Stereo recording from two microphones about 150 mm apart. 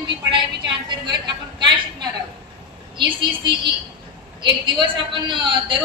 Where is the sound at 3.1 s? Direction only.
30° right (ahead or behind).